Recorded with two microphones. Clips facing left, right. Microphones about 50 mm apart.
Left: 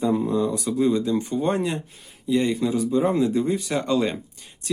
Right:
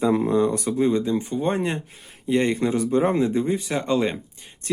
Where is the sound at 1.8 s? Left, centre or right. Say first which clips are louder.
Even; right.